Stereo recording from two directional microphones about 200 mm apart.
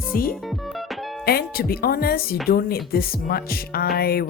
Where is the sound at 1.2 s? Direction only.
50° left (ahead or behind).